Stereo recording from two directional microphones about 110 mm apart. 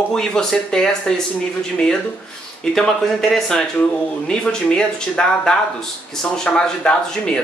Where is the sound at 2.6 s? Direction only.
5° left (ahead or behind).